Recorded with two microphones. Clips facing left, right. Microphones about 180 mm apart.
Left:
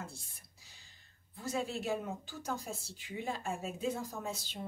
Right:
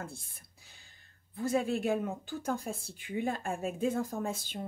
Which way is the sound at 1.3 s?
55° right (ahead or behind).